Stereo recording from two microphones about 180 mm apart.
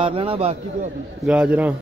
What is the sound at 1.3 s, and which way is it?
Speech, 5° right (ahead or behind).